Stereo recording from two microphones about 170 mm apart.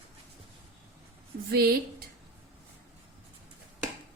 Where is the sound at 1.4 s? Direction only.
65° right (ahead or behind).